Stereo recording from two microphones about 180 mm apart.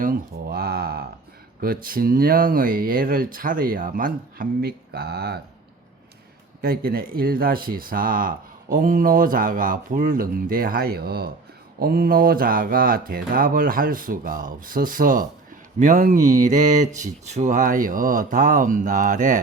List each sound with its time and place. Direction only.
0.0 s a sound: 55° right (ahead or behind)
1.6 s speech: 50° right (ahead or behind)
6.6 s speech: 55° right (ahead or behind)